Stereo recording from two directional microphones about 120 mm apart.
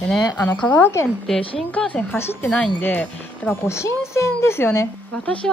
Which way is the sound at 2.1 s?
15° left (ahead or behind).